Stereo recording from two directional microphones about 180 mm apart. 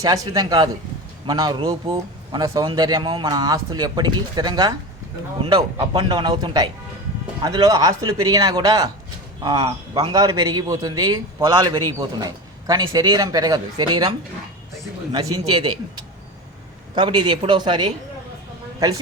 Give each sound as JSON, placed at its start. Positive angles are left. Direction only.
{"t": 0.0, "sound": "speech", "side_deg": -20}
{"t": 5.9, "sound": "speech", "side_deg": -25}
{"t": 15.1, "sound": "speech", "side_deg": -20}